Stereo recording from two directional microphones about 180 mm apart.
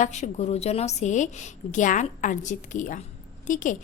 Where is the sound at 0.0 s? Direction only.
40° left (ahead or behind).